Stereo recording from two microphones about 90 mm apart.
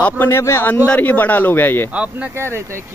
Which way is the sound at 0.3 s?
30° left (ahead or behind).